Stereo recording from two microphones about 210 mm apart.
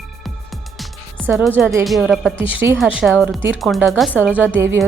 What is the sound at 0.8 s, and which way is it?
Music, centre (ahead or behind).